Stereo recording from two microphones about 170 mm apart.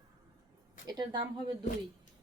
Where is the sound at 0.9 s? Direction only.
25° right (ahead or behind).